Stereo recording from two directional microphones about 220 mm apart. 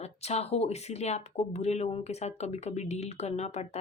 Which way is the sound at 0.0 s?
30° left (ahead or behind).